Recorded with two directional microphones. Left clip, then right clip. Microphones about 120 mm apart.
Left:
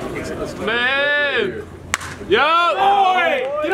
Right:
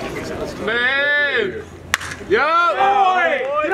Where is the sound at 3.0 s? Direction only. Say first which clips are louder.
Even; 45° left (ahead or behind).